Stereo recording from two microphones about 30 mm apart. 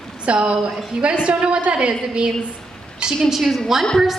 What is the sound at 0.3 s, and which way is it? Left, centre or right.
A woman's voice, right.